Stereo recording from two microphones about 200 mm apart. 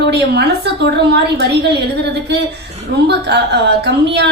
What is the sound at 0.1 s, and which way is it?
A woman's voice, 55° right (ahead or behind).